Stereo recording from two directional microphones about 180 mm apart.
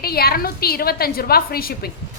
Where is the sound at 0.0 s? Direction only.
60° left (ahead or behind).